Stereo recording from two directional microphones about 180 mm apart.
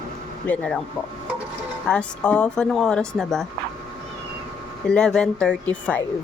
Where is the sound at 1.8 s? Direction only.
5° left (ahead or behind).